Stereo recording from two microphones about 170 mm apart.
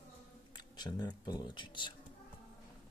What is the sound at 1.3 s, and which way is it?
Speech, 25° left (ahead or behind).